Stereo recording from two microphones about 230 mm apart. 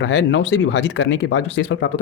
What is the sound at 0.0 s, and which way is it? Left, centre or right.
Speech, left.